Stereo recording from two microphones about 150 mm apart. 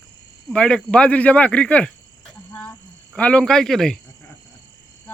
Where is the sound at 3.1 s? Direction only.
10° left (ahead or behind).